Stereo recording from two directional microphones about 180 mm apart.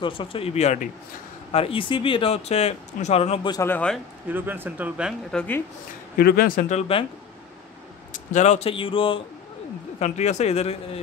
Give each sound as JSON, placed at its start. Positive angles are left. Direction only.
{"t": 0.0, "sound": "speech", "side_deg": 30}
{"t": 3.5, "sound": "speech", "side_deg": 10}
{"t": 4.3, "sound": "speech", "side_deg": -10}
{"t": 6.1, "sound": "speech", "side_deg": 55}
{"t": 6.8, "sound": "speech", "side_deg": 30}
{"t": 8.1, "sound": "speech", "side_deg": 45}